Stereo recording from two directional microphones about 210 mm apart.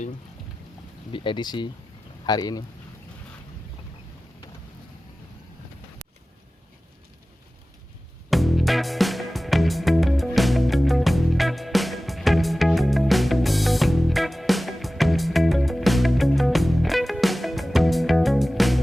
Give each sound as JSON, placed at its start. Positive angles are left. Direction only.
{"t": 1.1, "sound": "speech", "side_deg": 25}
{"t": 8.3, "sound": "music", "side_deg": 0}